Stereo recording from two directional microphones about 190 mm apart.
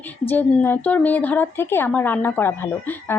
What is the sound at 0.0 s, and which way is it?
A woman's voice, 10° left (ahead or behind).